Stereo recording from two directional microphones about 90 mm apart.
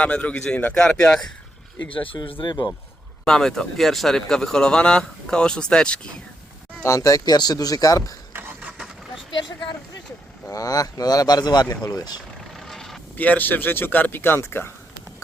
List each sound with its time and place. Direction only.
0.0 s speech: 15° left (ahead or behind)
2.4 s speech: 55° left (ahead or behind)
3.2 s speech: 5° left (ahead or behind)
6.8 s speech: 35° left (ahead or behind)
8.3 s vehicle: 20° right (ahead or behind)
10.5 s speech: 40° left (ahead or behind)
12.5 s vehicle: 5° left (ahead or behind)
13.1 s speech: 20° left (ahead or behind)